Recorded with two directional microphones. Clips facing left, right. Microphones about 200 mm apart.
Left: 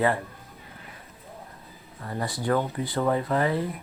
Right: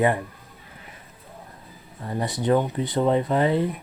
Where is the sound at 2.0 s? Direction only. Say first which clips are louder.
Right 4 dB; 20° right (ahead or behind).